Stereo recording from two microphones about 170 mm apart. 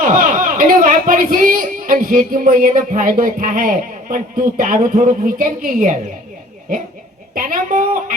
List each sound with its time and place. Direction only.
0.0 s speech: 50° right (ahead or behind)
7.3 s speech: 55° right (ahead or behind)